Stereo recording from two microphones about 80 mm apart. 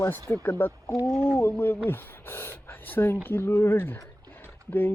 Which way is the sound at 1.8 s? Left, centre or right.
Left.